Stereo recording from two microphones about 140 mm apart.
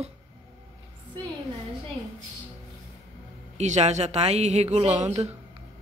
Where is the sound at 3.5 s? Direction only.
55° right (ahead or behind).